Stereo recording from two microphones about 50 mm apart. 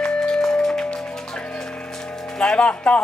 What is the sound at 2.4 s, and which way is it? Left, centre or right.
Speech, left.